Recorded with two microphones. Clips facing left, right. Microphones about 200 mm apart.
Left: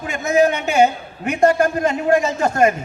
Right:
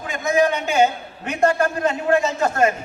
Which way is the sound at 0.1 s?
10° left (ahead or behind).